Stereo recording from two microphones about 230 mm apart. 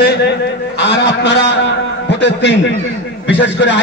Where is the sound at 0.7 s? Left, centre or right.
Left.